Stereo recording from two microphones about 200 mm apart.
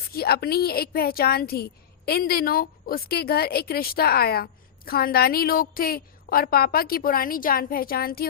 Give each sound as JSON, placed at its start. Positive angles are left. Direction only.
{"t": 0.1, "sound": "a woman's voice", "side_deg": 50}